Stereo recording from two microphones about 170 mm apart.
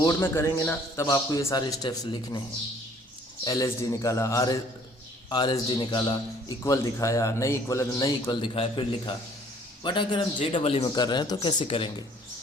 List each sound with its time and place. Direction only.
0.0 s a man's voice: 15° left (ahead or behind)
3.4 s a man's voice: 20° left (ahead or behind)